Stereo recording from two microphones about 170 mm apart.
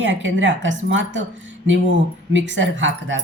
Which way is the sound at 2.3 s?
90° right.